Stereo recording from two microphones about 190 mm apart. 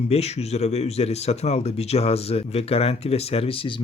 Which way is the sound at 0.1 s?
35° left (ahead or behind).